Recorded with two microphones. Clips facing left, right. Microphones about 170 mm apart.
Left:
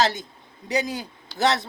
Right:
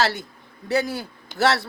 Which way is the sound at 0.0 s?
20° left (ahead or behind).